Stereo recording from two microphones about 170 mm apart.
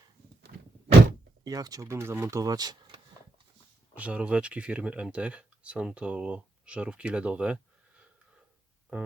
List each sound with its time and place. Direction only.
1.5 s speech: 20° right (ahead or behind)
3.9 s speech: 10° right (ahead or behind)
8.9 s speech: 10° right (ahead or behind)